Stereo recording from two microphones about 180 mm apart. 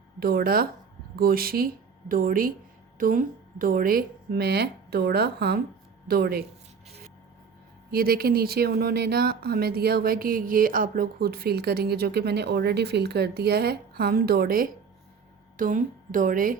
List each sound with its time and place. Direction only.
0.2 s speech: 55° right (ahead or behind)
7.9 s speech: 55° right (ahead or behind)